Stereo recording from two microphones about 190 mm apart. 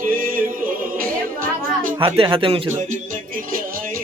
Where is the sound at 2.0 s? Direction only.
25° right (ahead or behind).